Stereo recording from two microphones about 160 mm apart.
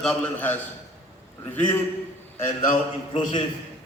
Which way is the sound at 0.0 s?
5° left (ahead or behind).